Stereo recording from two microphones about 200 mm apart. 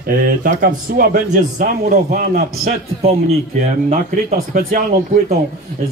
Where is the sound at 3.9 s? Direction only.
45° right (ahead or behind).